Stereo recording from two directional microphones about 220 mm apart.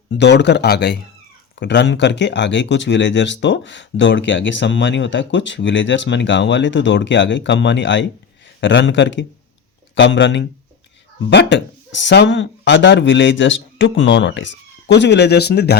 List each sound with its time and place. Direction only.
0.2 s speech: 50° left (ahead or behind)